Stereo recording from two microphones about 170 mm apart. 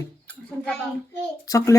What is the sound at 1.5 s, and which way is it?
Speech, 20° left (ahead or behind).